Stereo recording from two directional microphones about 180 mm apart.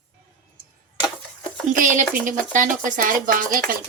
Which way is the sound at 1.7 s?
45° right (ahead or behind).